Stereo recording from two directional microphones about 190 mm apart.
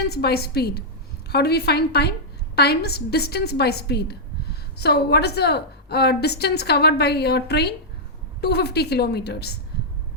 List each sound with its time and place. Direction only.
0.1 s a woman's voice: 55° left (ahead or behind)